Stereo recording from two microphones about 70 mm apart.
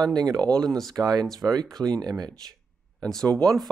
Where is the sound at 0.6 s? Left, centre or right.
Centre.